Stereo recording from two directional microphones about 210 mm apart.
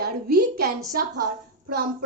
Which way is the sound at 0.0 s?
50° right (ahead or behind).